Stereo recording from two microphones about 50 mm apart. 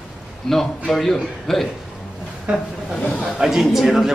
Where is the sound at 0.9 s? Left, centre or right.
Centre.